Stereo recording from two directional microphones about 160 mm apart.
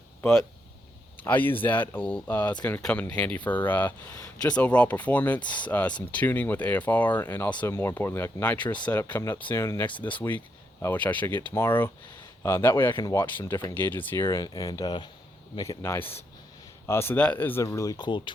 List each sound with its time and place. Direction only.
1.2 s speech: 10° left (ahead or behind); by 18.3 s 30° left (ahead or behind)